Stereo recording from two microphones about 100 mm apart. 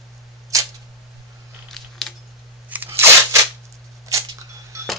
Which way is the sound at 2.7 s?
20° right (ahead or behind).